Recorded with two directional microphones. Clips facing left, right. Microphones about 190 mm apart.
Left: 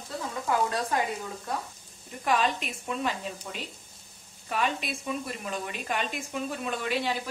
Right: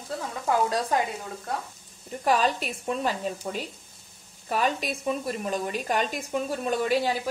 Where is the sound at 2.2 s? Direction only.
35° right (ahead or behind).